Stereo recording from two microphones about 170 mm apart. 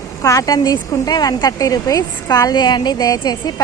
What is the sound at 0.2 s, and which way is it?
Speech, 20° left (ahead or behind).